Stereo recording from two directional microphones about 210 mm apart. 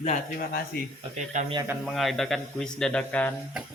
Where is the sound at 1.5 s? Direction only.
10° right (ahead or behind).